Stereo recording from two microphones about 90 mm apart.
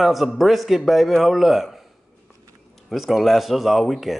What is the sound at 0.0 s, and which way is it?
A man's voice, centre (ahead or behind).